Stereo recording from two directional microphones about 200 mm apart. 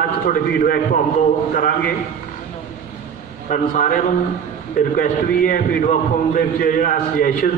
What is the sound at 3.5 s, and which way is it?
Speech, 40° left (ahead or behind).